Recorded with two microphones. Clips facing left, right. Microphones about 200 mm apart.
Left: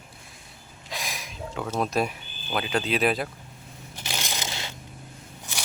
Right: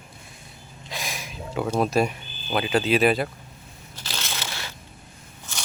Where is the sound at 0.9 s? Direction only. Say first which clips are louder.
Right 2 dB; centre (ahead or behind).